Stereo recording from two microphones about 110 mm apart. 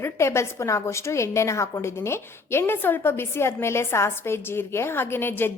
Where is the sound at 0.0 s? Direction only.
25° left (ahead or behind).